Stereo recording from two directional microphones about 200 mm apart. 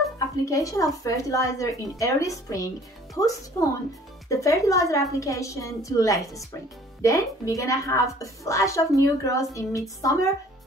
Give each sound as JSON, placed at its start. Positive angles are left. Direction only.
{"t": 0.5, "sound": "a woman's voice", "side_deg": 15}